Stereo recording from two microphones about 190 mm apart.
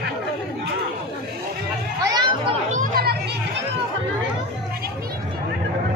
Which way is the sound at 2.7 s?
50° right (ahead or behind).